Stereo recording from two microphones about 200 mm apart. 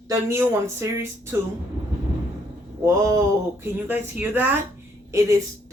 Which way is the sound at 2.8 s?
15° right (ahead or behind).